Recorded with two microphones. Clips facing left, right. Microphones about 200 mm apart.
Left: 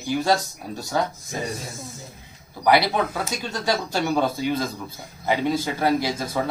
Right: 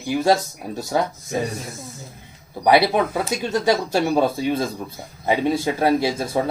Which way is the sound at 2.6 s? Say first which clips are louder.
Right 3 dB; 25° right (ahead or behind).